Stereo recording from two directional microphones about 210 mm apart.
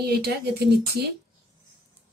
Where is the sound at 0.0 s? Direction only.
45° right (ahead or behind).